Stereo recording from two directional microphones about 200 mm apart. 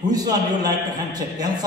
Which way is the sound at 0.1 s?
20° right (ahead or behind).